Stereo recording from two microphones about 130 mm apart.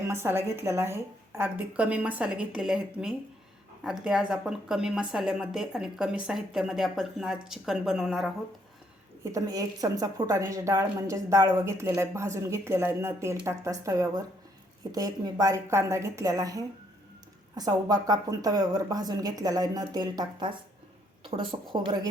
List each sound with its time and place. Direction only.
0.0 s a woman's voice: 20° right (ahead or behind); by 8.3 s centre (ahead or behind)
9.3 s a woman's voice: 25° right (ahead or behind)